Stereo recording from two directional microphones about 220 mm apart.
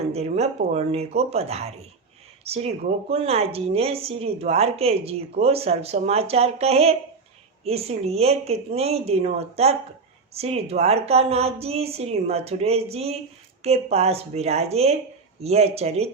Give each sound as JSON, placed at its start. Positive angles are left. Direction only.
{"t": 0.1, "sound": "speech", "side_deg": -30}